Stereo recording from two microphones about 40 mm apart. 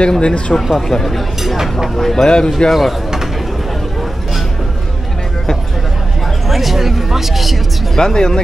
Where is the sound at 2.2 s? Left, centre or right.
Left.